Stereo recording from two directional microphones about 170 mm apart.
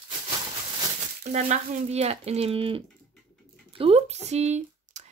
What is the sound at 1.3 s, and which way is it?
Speech, 40° right (ahead or behind).